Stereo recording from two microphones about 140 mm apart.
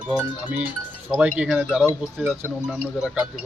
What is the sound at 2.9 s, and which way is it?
Speech, 5° right (ahead or behind).